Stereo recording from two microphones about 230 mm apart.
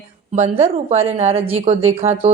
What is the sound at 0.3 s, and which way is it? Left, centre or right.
Speech, right.